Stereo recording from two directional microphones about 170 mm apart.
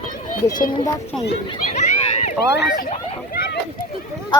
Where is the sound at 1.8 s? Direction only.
40° left (ahead or behind).